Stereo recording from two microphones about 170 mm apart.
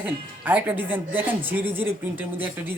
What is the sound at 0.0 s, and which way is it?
Speech, 10° right (ahead or behind).